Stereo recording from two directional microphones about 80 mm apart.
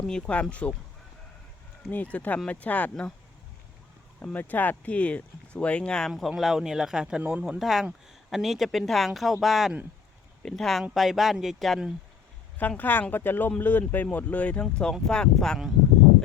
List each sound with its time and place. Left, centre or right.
0.0 s speech: centre
1.9 s speech: centre
4.2 s speech: left; by 7.2 s centre
7.2 s speech: right
7.6 s speech: centre
12.5 s speech: left; by 15.7 s centre